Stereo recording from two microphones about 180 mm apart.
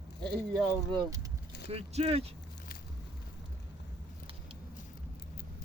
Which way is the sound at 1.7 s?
35° right (ahead or behind).